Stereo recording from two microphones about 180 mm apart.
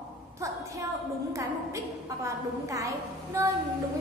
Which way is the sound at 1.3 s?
15° right (ahead or behind).